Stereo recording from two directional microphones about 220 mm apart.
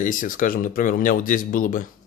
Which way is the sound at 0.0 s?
35° left (ahead or behind).